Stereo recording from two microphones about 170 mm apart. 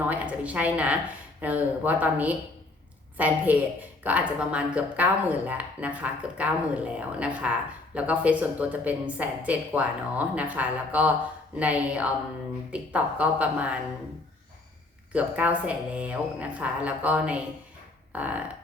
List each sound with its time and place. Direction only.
0.1 s speech: 10° right (ahead or behind)
15.1 s speech: 10° right (ahead or behind)